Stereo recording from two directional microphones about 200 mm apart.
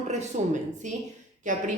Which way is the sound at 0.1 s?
40° right (ahead or behind).